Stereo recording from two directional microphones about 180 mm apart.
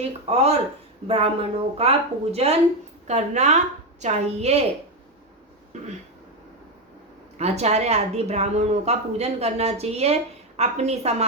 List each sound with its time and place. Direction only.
0.3 s speech: 35° right (ahead or behind)
5.7 s speech: 40° right (ahead or behind)
7.3 s speech: 35° right (ahead or behind)